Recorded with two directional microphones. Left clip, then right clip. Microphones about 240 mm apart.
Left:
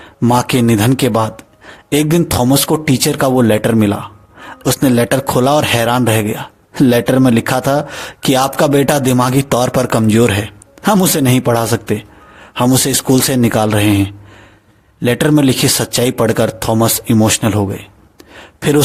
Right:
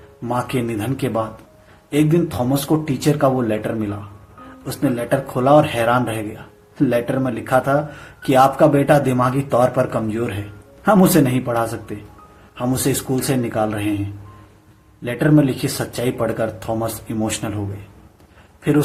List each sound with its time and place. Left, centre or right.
0.2 s speech: left
15.0 s speech: left